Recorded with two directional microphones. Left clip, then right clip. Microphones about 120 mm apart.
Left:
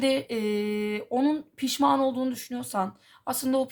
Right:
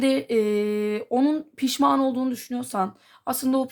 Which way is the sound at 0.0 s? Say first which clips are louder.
Right 4 dB; 40° right (ahead or behind).